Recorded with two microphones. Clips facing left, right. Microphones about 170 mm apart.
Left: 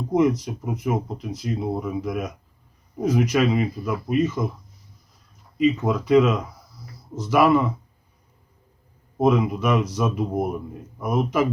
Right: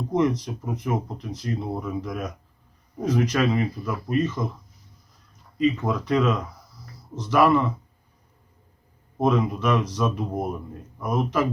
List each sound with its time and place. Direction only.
0.1 s speech: 10° left (ahead or behind)
5.5 s speech: 5° left (ahead or behind)
9.1 s speech: 10° left (ahead or behind)